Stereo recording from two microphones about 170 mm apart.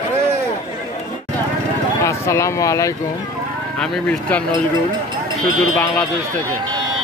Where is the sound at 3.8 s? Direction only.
5° left (ahead or behind).